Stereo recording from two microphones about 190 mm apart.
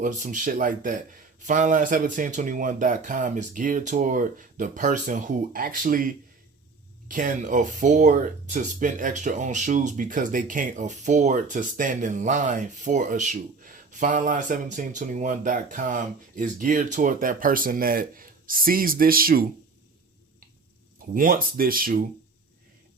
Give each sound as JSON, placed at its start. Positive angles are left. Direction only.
{"t": 0.0, "sound": "speech", "side_deg": -45}
{"t": 21.1, "sound": "speech", "side_deg": -45}